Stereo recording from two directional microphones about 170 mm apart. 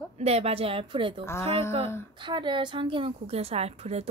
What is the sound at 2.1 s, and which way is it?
Speech, 30° right (ahead or behind).